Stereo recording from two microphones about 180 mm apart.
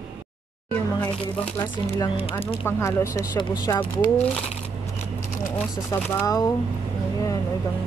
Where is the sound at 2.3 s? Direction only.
30° left (ahead or behind).